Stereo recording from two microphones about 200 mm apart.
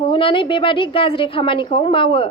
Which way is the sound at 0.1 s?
25° left (ahead or behind).